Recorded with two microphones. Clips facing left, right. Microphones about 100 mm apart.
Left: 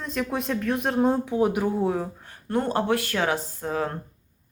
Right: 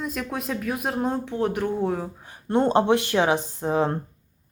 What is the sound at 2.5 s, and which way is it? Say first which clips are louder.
Speech: right 4 dB; 25° right (ahead or behind).